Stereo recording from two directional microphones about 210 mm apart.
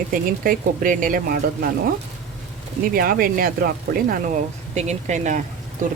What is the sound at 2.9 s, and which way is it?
Speech, 45° right (ahead or behind).